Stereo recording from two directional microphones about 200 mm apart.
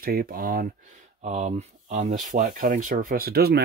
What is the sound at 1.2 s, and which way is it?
Speech, 35° right (ahead or behind).